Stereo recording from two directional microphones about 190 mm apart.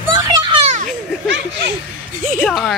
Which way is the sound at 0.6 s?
40° right (ahead or behind).